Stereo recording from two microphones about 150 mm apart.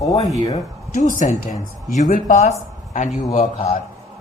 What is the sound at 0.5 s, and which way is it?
Speech, 55° left (ahead or behind).